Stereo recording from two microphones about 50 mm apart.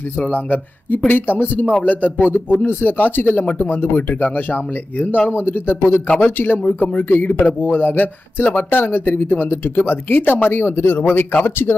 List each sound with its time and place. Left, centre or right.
0.2 s speech: left
0.9 s speech: left
4.2 s speech: left
5.3 s speech: left